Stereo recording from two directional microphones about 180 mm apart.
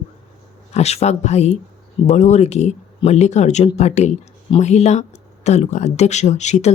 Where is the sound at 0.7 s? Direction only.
35° left (ahead or behind).